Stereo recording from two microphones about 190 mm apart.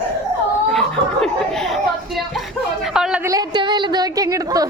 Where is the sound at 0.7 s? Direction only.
Centre (ahead or behind).